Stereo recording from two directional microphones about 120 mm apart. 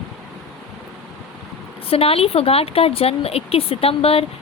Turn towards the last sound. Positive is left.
turn(degrees=55)  # may be behind; listen again after turning